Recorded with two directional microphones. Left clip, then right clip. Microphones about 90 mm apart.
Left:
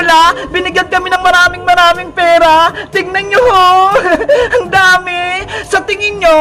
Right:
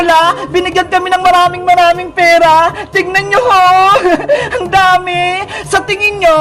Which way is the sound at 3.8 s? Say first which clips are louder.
Right 1 dB; 15° left (ahead or behind).